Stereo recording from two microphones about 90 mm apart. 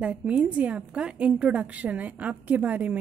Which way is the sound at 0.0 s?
10° right (ahead or behind).